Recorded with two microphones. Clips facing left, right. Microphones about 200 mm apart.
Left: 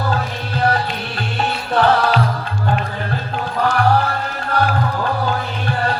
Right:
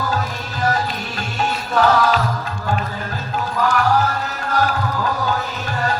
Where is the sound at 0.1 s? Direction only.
45° right (ahead or behind).